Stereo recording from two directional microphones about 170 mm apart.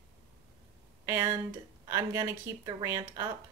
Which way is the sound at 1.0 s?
15° right (ahead or behind).